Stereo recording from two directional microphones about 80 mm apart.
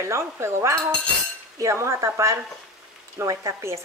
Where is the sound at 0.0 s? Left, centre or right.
Right.